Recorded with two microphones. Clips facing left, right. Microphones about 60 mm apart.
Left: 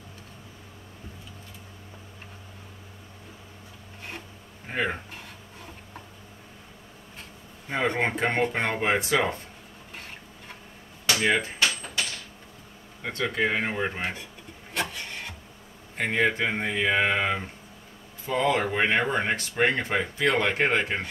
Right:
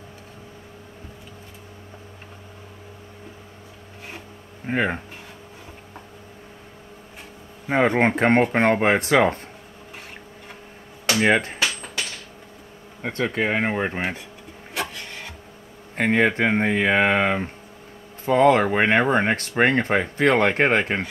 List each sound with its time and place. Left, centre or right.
4.6 s speech: right
7.7 s speech: right
11.1 s speech: right
13.0 s speech: right
14.7 s wood: centre
16.0 s speech: right